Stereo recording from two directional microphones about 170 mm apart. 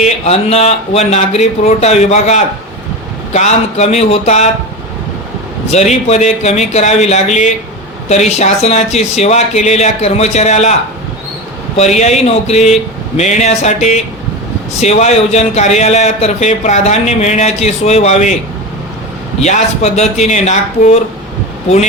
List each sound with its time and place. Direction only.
0.0 s speech: 40° left (ahead or behind)
5.6 s speech: 40° left (ahead or behind)
11.8 s speech: 40° left (ahead or behind)
19.4 s speech: 40° left (ahead or behind)